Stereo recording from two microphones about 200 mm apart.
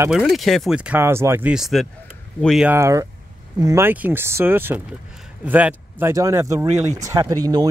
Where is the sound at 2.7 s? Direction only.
15° right (ahead or behind).